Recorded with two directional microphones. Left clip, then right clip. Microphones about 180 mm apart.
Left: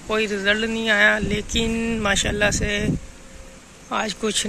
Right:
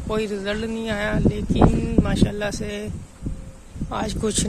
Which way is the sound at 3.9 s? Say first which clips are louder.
Left 2 dB; 20° right (ahead or behind).